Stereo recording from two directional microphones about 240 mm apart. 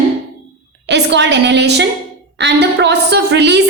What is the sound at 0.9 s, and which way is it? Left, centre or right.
A woman's voice, right.